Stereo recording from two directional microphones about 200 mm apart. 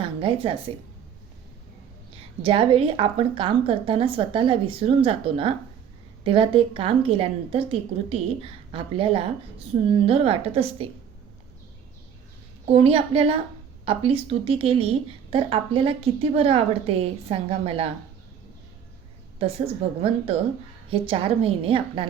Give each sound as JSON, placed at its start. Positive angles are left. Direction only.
{"t": 0.0, "sound": "a sound", "side_deg": -25}
{"t": 2.4, "sound": "a woman's voice", "side_deg": -25}
{"t": 12.6, "sound": "a woman's voice", "side_deg": -30}
{"t": 19.4, "sound": "a woman's voice", "side_deg": -30}